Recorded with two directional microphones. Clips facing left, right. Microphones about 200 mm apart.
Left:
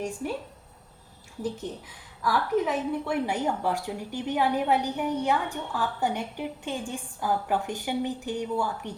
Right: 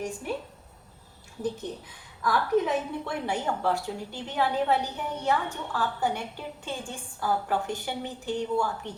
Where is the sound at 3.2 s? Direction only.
15° left (ahead or behind).